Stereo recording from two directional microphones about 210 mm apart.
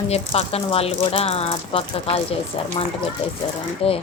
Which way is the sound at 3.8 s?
25° left (ahead or behind).